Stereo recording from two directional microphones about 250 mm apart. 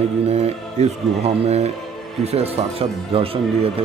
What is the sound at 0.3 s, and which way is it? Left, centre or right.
A man's voice, right.